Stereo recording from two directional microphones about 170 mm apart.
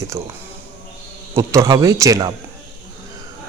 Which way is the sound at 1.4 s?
15° right (ahead or behind).